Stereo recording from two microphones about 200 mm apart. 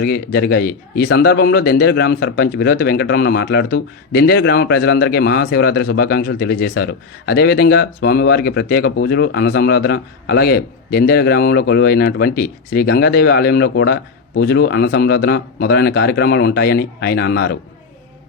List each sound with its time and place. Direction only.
0.0 s a man's voice: 50° left (ahead or behind)